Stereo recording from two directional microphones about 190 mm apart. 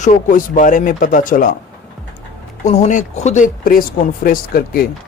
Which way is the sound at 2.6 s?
35° left (ahead or behind).